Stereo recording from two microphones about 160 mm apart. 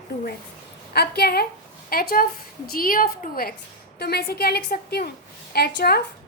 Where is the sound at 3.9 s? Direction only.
80° left.